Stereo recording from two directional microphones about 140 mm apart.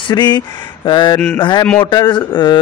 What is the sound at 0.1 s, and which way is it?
A man's voice, 30° left (ahead or behind).